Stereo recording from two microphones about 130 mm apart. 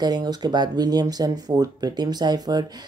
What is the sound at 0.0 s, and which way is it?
Speech, 30° right (ahead or behind).